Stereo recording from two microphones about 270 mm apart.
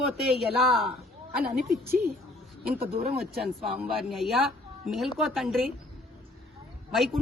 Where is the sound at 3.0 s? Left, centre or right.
Right.